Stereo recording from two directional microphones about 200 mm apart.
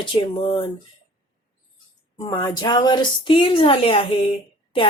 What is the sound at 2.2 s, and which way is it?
Speech, 20° left (ahead or behind).